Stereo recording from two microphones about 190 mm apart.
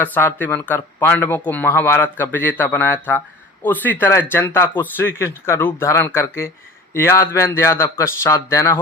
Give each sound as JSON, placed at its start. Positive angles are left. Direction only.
{"t": 0.0, "sound": "speech", "side_deg": 10}